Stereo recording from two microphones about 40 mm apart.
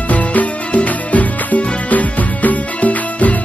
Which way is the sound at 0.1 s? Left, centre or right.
Left.